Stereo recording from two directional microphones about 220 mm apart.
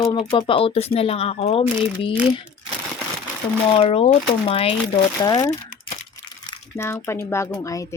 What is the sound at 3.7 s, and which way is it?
Speech, 25° left (ahead or behind).